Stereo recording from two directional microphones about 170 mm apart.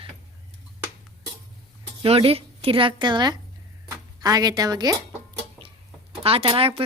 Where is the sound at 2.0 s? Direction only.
35° right (ahead or behind).